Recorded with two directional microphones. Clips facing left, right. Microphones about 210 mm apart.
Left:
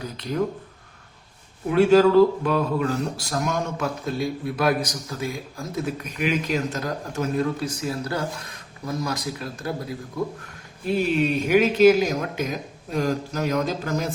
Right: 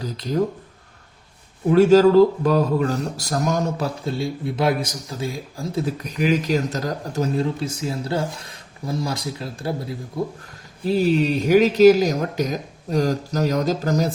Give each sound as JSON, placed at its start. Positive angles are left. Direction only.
{"t": 0.0, "sound": "speech", "side_deg": -35}
{"t": 1.7, "sound": "speech", "side_deg": -40}